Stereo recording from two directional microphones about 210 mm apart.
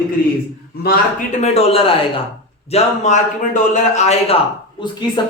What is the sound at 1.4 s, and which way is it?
A man's voice, 30° left (ahead or behind).